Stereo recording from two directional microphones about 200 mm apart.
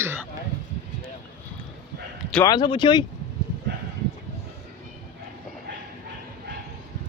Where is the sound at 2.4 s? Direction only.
20° left (ahead or behind).